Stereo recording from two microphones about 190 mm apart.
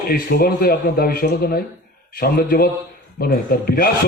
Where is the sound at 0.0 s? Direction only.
55° left (ahead or behind).